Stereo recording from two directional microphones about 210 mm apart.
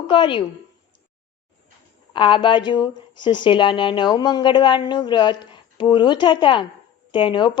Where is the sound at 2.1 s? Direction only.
25° left (ahead or behind).